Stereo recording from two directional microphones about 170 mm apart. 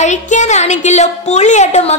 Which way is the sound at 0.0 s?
45° left (ahead or behind).